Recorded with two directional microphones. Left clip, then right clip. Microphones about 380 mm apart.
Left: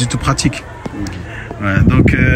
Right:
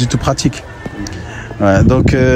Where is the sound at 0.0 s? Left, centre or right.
Centre.